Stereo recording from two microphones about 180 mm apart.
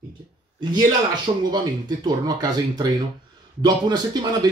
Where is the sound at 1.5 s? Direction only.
20° right (ahead or behind).